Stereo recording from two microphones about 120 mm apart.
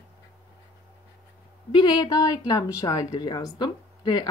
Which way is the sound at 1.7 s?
40° left (ahead or behind).